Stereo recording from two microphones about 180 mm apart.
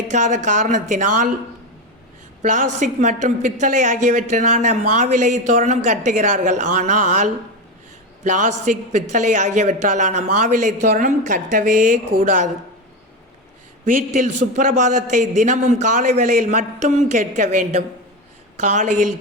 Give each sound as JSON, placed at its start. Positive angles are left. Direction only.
{"t": 0.1, "sound": "a woman's voice", "side_deg": -45}
{"t": 2.4, "sound": "a woman's voice", "side_deg": -45}
{"t": 13.8, "sound": "a woman's voice", "side_deg": -50}